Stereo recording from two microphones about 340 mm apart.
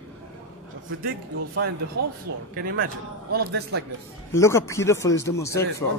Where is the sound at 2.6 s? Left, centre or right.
Right.